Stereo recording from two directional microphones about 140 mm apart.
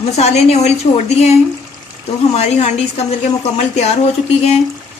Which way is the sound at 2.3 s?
50° left (ahead or behind).